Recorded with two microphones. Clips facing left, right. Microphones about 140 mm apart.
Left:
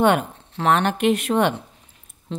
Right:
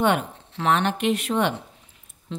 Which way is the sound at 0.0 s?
50° left (ahead or behind).